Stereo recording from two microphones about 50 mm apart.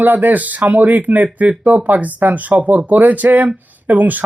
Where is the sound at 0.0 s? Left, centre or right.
Right.